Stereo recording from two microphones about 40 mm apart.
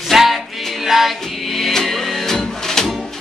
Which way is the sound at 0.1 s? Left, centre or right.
Centre.